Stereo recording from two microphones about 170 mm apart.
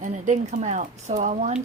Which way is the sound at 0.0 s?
45° right (ahead or behind).